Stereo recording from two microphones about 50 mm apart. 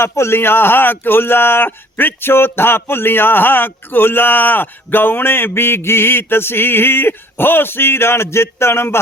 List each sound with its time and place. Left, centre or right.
0.0 s speech: left